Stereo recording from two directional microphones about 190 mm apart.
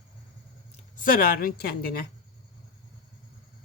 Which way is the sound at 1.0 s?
50° left (ahead or behind).